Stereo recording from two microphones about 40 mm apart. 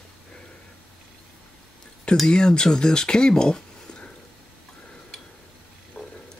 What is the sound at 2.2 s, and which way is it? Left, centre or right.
Speech, centre.